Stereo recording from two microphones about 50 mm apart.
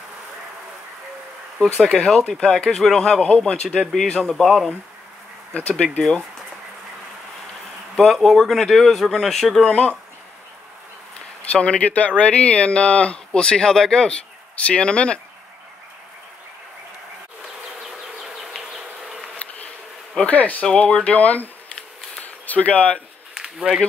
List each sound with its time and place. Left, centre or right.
1.8 s speech: centre
4.1 s speech: centre
5.5 s speech: left
7.9 s speech: centre
9.6 s speech: left
11.5 s speech: left
20.2 s speech: left
22.2 s a sound: left
23.3 s a sound: centre